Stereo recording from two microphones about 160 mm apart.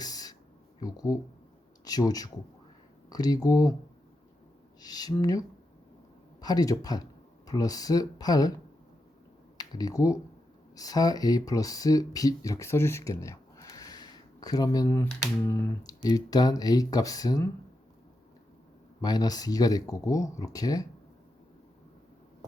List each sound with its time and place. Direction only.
0.0 s a sound: 25° left (ahead or behind)
0.8 s speech: 25° left (ahead or behind)
4.8 s speech: 25° left (ahead or behind)
6.4 s speech: 25° left (ahead or behind)
9.6 s speech: 25° left (ahead or behind)
19.0 s speech: 25° left (ahead or behind)